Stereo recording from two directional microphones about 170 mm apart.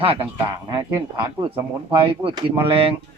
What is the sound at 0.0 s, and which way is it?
Speech, 35° right (ahead or behind).